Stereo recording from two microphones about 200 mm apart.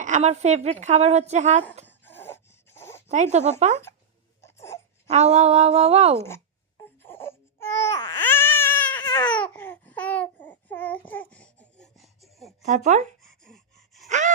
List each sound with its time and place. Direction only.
0.0 s speech: 35° right (ahead or behind)
1.9 s a sound: 10° left (ahead or behind)
3.1 s speech: 35° right (ahead or behind)
4.4 s a sound: 15° left (ahead or behind)
5.0 s speech: 35° right (ahead or behind)
6.1 s speech: 10° left (ahead or behind)
7.0 s baby cry: 10° left (ahead or behind)
9.0 s babbling: 20° left (ahead or behind)
9.3 s babbling: 5° left (ahead or behind)
12.6 s speech: 35° right (ahead or behind)
13.4 s gasp: centre (ahead or behind)
14.1 s gasp: 35° right (ahead or behind)